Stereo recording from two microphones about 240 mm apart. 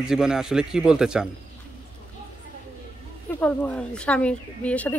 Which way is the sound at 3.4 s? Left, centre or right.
Centre.